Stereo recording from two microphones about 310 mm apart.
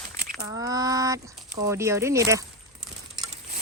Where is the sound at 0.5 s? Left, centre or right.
Centre.